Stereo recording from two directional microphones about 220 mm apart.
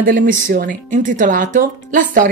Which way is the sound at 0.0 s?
40° right (ahead or behind).